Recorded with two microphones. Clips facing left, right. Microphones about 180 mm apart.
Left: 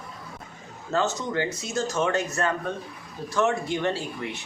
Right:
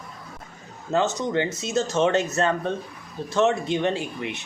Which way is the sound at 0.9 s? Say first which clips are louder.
Right 3 dB; 20° right (ahead or behind).